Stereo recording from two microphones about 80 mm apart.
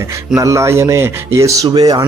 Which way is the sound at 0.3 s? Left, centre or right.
Right.